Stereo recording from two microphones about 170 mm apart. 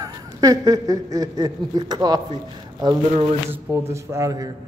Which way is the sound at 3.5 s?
15° right (ahead or behind).